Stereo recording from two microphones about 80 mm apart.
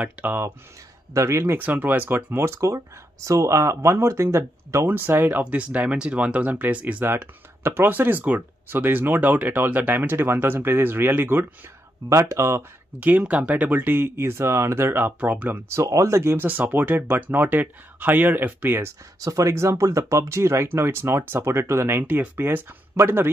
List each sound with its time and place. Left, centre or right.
0.0 s speech: right
1.1 s speech: right
1.6 s speech: right
4.8 s speech: right
13.0 s speech: centre
15.7 s speech: right
16.4 s speech: right
19.1 s speech: right